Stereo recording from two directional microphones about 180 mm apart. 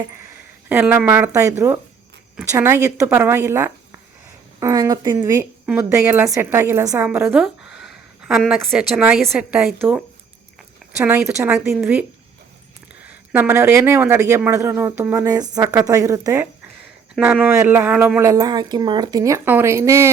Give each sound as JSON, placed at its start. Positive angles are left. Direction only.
{"t": 0.7, "sound": "speech", "side_deg": -10}
{"t": 11.0, "sound": "speech", "side_deg": -10}
{"t": 13.3, "sound": "speech", "side_deg": -10}